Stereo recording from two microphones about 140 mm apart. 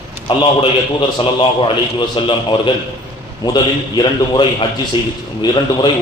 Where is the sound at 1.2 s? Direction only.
35° left (ahead or behind).